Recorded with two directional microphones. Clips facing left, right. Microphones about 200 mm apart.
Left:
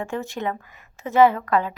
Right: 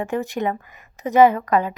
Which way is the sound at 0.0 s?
15° right (ahead or behind).